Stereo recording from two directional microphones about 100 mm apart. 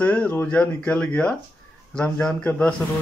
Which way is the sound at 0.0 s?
15° left (ahead or behind).